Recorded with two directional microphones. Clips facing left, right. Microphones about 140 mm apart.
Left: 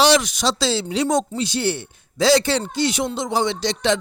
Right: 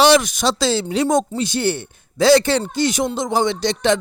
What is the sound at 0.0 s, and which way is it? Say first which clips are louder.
Speech: right 3 dB; 55° right (ahead or behind).